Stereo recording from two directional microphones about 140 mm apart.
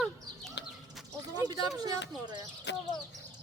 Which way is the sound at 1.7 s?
25° right (ahead or behind).